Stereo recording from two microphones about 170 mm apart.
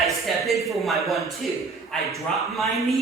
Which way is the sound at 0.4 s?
Centre (ahead or behind).